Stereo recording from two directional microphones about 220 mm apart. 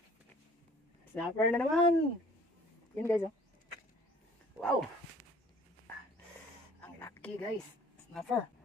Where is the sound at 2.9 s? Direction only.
10° left (ahead or behind).